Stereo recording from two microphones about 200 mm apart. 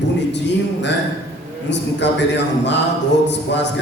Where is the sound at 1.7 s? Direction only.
60° left (ahead or behind).